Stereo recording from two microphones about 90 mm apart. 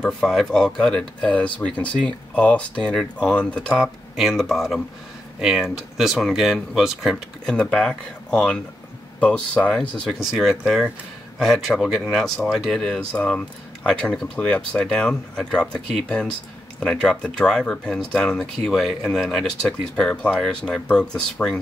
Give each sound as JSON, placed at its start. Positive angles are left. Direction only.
{"t": 0.0, "sound": "speech", "side_deg": 5}
{"t": 4.2, "sound": "speech", "side_deg": 0}
{"t": 7.7, "sound": "speech", "side_deg": 10}
{"t": 10.3, "sound": "speech", "side_deg": -5}